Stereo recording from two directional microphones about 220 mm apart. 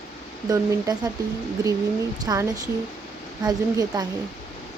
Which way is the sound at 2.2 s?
15° right (ahead or behind).